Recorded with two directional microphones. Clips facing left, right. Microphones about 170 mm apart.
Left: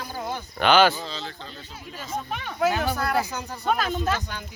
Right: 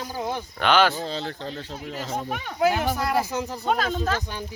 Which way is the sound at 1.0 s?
60° right (ahead or behind).